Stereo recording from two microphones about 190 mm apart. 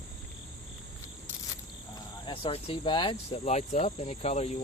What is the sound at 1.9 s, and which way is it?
Speech, 25° left (ahead or behind).